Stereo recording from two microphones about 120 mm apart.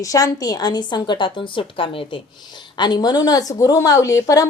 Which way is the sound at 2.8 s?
35° left (ahead or behind).